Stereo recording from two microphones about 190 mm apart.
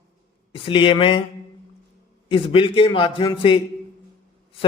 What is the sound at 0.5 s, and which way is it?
Speech, 30° left (ahead or behind).